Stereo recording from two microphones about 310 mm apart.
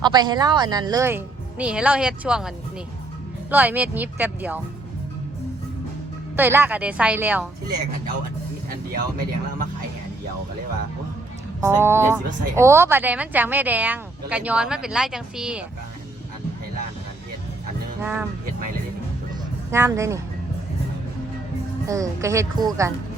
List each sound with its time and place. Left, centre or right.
0.0 s speech: centre
3.5 s speech: centre
6.3 s speech: centre
8.7 s speech: right
11.6 s speech: centre
18.0 s speech: centre
19.7 s speech: centre
21.8 s speech: centre